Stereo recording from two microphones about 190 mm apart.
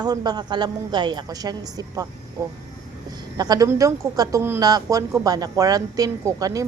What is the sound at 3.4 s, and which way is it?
A woman's voice, 20° right (ahead or behind).